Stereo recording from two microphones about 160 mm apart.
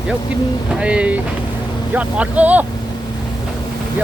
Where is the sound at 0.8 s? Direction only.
10° right (ahead or behind).